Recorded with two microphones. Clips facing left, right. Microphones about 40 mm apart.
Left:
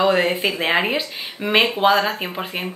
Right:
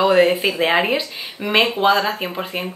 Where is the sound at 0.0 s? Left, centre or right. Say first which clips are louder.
Right 3 dB; centre.